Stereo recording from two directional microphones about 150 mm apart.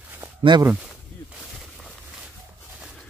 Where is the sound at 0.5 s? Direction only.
30° right (ahead or behind).